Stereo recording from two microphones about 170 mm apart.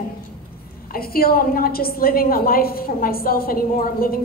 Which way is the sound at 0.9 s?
60° left (ahead or behind).